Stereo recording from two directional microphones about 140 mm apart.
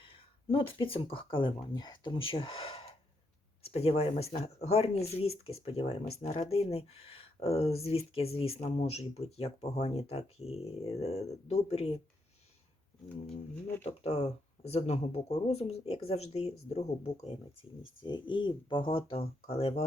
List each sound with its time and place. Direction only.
0.0 s speech: 40° left (ahead or behind)
13.8 s speech: 45° left (ahead or behind)